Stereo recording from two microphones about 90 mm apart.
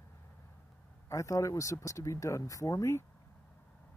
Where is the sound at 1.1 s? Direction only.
35° left (ahead or behind).